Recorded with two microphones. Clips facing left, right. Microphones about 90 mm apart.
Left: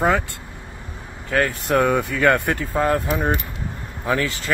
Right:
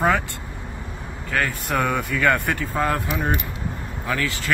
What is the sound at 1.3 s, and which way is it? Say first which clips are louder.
Speech: left 4 dB; 25° left (ahead or behind).